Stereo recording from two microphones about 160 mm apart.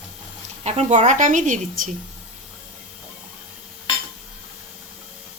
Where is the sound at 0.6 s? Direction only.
40° right (ahead or behind).